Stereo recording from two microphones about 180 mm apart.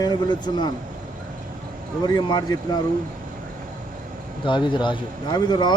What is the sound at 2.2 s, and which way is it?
Speech, 20° left (ahead or behind).